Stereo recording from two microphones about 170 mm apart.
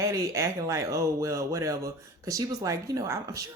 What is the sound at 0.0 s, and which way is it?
Speech, 20° right (ahead or behind).